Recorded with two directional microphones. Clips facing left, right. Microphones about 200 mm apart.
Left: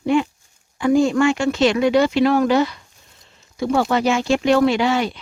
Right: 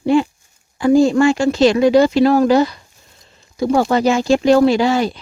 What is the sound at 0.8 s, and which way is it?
Speech, 35° right (ahead or behind).